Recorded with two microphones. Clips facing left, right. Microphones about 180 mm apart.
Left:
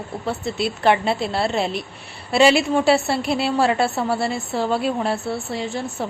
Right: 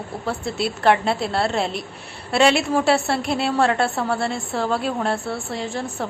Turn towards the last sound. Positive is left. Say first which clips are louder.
# left 1 dB
turn(degrees=0)  # may be behind; listen again after turning